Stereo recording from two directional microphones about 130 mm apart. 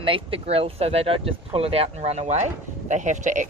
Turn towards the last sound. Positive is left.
turn(degrees=-70)  # may be behind; listen again after turning